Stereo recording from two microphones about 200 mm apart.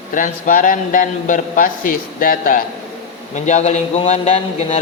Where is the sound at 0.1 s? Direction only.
40° left (ahead or behind).